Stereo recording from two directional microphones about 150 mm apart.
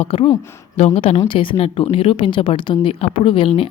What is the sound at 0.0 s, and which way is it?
A woman's voice, 40° left (ahead or behind).